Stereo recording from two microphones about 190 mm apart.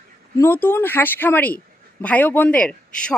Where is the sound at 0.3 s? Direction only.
10° left (ahead or behind).